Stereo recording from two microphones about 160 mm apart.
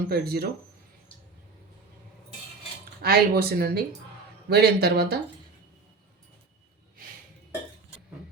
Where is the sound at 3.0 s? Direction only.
80° right.